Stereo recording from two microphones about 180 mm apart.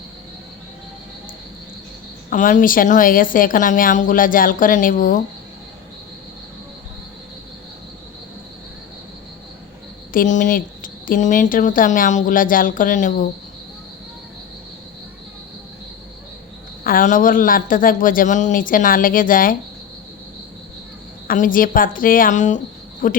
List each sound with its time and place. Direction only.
2.3 s speech: 45° left (ahead or behind)
10.1 s speech: 45° left (ahead or behind)
16.8 s speech: 50° left (ahead or behind)
21.2 s speech: 50° left (ahead or behind)